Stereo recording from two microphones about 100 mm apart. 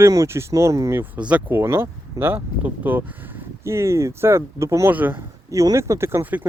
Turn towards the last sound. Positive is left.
turn(degrees=-20)  # may be behind; listen again after turning